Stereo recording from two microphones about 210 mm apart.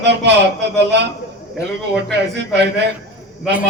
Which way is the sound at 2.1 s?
55° right (ahead or behind).